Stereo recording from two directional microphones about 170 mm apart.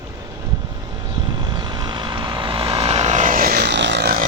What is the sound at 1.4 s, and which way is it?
Vehicle, 25° right (ahead or behind).